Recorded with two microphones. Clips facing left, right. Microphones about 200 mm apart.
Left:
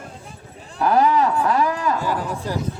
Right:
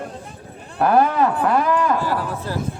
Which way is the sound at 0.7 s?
55° right (ahead or behind).